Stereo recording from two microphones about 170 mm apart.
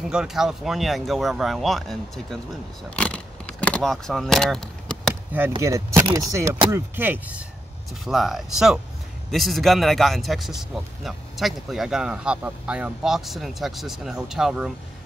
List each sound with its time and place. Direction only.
0.1 s speech: 5° right (ahead or behind)
3.0 s keys jangling: 5° left (ahead or behind)
5.6 s speech: 15° right (ahead or behind)
6.1 s chopping: 20° right (ahead or behind)
6.7 s speech: 10° right (ahead or behind)